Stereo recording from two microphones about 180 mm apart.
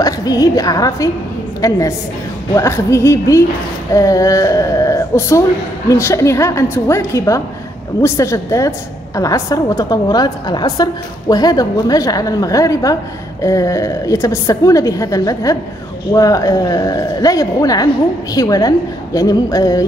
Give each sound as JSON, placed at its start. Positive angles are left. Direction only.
{"t": 0.0, "sound": "a woman's voice", "side_deg": 20}